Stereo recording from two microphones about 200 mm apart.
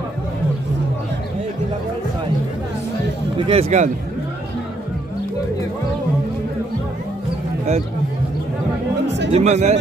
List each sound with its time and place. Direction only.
3.3 s speech: 30° right (ahead or behind)
9.3 s speech: 35° right (ahead or behind)